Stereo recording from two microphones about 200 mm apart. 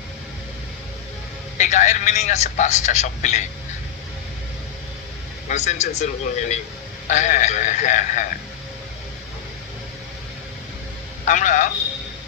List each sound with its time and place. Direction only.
1.6 s a man's voice: 35° left (ahead or behind)
5.5 s a man's voice: 35° left (ahead or behind)
11.2 s a man's voice: 40° left (ahead or behind)